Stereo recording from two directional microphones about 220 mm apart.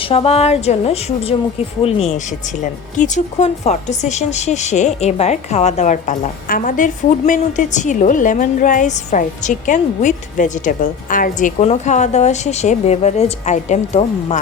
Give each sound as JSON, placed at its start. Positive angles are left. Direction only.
{"t": 0.1, "sound": "a woman's voice", "side_deg": 25}